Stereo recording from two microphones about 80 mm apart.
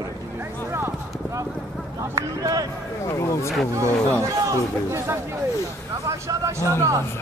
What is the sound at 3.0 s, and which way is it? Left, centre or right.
Speech, left.